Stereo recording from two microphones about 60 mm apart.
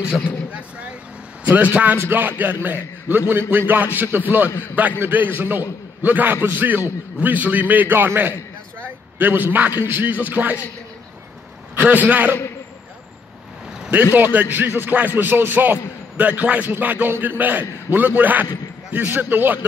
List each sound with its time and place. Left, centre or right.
0.5 s vehicle: right
1.5 s a man's voice: right
11.8 s a man's voice: right
14.1 s a man's voice: right